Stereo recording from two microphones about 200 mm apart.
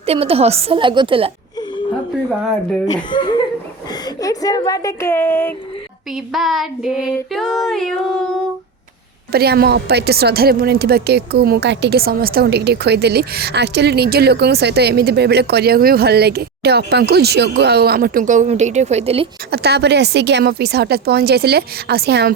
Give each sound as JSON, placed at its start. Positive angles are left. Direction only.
{"t": 0.0, "sound": "a woman's voice", "side_deg": -30}
{"t": 2.8, "sound": "speech", "side_deg": 20}
{"t": 6.3, "sound": "child singing", "side_deg": 0}
{"t": 9.3, "sound": "a woman's voice", "side_deg": -50}
{"t": 19.5, "sound": "a woman's voice", "side_deg": -55}